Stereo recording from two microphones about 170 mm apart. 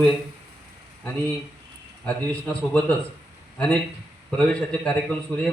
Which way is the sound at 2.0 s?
5° left (ahead or behind).